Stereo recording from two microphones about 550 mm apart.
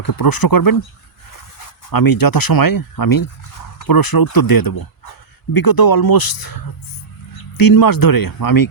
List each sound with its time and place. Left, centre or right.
0.0 s speech: left
1.9 s speech: left